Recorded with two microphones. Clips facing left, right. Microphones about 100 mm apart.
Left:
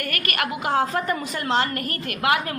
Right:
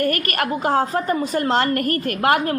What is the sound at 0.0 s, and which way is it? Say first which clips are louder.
A woman's voice: right 6 dB; 35° right (ahead or behind).